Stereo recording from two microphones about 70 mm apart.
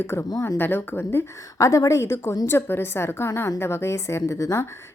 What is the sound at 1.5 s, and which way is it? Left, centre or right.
A woman's voice, left.